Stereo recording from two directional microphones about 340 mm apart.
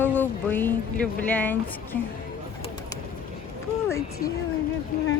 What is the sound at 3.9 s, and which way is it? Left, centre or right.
Speech, centre.